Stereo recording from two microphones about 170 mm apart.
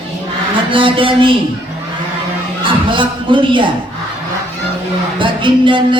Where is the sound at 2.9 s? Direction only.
30° right (ahead or behind).